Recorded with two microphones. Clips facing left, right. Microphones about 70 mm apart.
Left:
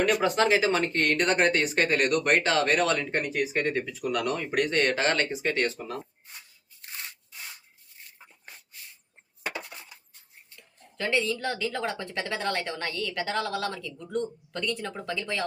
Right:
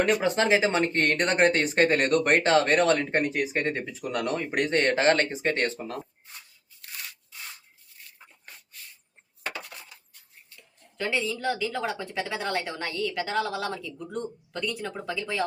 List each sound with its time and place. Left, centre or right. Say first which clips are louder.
0.0 s speech: even; right
9.6 s a sound: left 1 dB; left
10.9 s a woman's voice: left 1 dB; centre